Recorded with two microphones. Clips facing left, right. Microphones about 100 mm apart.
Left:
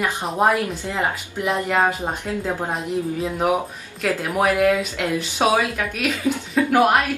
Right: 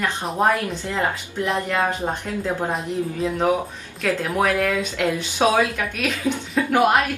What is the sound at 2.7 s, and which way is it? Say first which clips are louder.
A woman's voice: left 1 dB; centre (ahead or behind).